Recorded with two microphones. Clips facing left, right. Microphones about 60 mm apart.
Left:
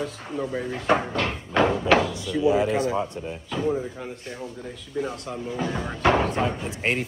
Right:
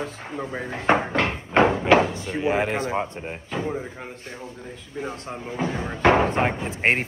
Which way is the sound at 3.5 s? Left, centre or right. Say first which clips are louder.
Left 3 dB; right.